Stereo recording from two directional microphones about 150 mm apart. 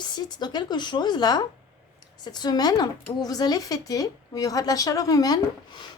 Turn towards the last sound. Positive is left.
turn(degrees=30)  # may be behind; listen again after turning